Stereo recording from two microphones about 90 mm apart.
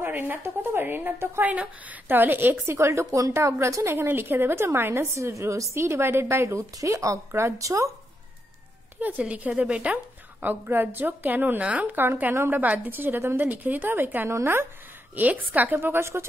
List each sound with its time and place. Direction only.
0.0 s a woman's voice: 20° right (ahead or behind)
1.5 s speech: 10° right (ahead or behind)
2.0 s a woman's voice: 20° right (ahead or behind)
9.3 s a woman's voice: 15° right (ahead or behind)